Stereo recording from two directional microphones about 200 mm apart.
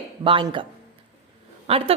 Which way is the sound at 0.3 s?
25° right (ahead or behind).